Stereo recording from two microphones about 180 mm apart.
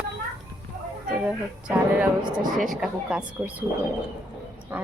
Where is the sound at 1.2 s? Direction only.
5° right (ahead or behind).